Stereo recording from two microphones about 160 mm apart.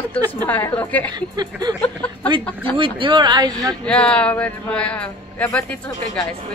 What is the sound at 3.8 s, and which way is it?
A woman's voice, 5° left (ahead or behind).